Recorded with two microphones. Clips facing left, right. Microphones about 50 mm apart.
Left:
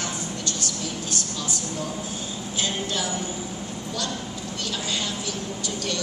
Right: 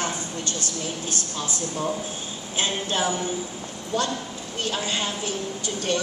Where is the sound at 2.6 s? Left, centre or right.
Right.